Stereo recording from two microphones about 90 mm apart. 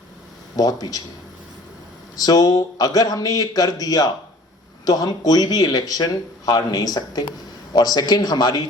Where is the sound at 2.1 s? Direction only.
45° left (ahead or behind).